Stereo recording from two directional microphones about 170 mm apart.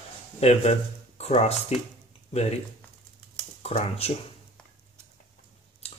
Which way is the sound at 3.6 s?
35° left (ahead or behind).